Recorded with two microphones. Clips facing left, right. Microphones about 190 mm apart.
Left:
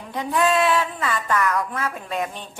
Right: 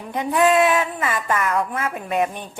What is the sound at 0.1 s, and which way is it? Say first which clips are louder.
A woman's voice: right 3 dB; 20° right (ahead or behind).